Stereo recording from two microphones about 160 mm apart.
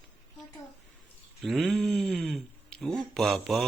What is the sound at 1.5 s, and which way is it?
Speech, centre (ahead or behind).